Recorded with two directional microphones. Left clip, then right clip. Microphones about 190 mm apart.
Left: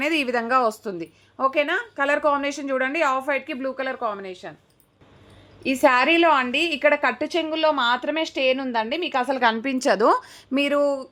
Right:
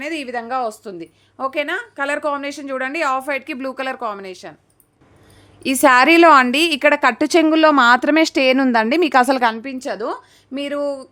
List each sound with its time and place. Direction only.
0.0 s a woman's voice: 20° left (ahead or behind); by 3.6 s 10° right (ahead or behind)
3.6 s a woman's voice: 25° right (ahead or behind)
5.6 s a woman's voice: 30° right (ahead or behind)
7.2 s a woman's voice: 55° right (ahead or behind)
9.6 s a woman's voice: 20° left (ahead or behind)